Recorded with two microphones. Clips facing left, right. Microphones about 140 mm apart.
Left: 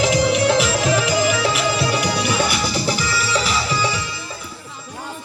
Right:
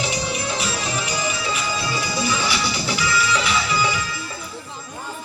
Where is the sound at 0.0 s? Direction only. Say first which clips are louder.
Left 9 dB; 90° left; by 4.0 s 35° left (ahead or behind).